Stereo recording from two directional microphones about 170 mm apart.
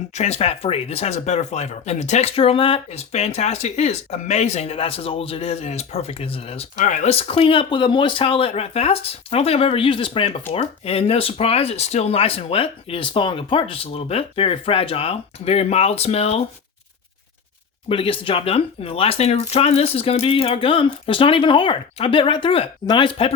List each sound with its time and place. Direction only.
0.1 s speech: 40° left (ahead or behind)
17.8 s speech: 30° left (ahead or behind)